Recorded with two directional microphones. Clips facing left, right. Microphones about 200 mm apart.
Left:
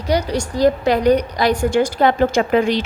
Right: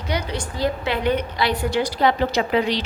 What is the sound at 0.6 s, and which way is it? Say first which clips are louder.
A woman's voice: left 8 dB; 40° left (ahead or behind).